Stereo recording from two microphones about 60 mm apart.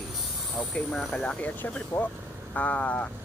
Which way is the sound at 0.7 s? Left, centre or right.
Centre.